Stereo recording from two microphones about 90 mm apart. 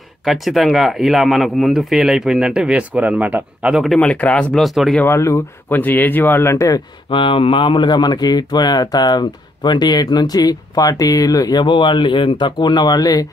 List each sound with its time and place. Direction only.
0.2 s speech: centre (ahead or behind); by 3.7 s 20° right (ahead or behind)
3.7 s speech: centre (ahead or behind)
4.0 s speech: 15° left (ahead or behind)
4.6 s speech: centre (ahead or behind)
5.0 s speech: 30° left (ahead or behind)
5.8 s speech: 20° left (ahead or behind)
7.1 s speech: 70° left (ahead or behind); by 11.6 s 45° left (ahead or behind)
11.6 s speech: 60° left (ahead or behind); by 13.3 s 45° left (ahead or behind)